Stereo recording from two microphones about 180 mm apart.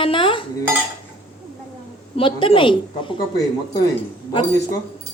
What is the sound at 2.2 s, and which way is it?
Speech, 30° left (ahead or behind).